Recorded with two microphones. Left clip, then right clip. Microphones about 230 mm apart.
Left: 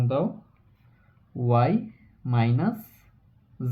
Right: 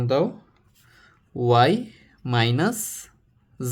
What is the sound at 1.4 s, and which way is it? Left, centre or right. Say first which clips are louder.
Speech: right 6 dB; right.